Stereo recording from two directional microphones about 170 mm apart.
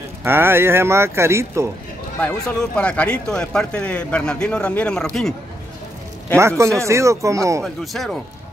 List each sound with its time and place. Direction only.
0.2 s speech: 15° right (ahead or behind)
2.2 s speech: 5° left (ahead or behind)
6.8 s speech: 15° right (ahead or behind)
7.6 s speech: centre (ahead or behind)